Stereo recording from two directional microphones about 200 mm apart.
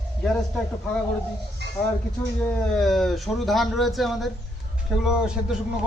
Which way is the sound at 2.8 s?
Centre (ahead or behind).